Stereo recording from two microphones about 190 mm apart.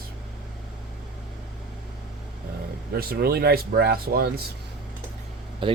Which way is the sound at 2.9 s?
55° right (ahead or behind).